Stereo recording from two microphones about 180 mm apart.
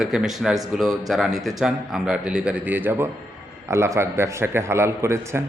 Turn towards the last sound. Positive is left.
turn(degrees=-15)  # may be behind; listen again after turning